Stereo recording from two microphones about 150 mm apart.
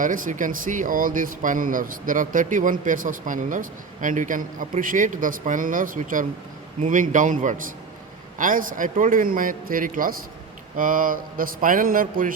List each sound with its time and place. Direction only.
0.0 s a man's voice: 60° right (ahead or behind)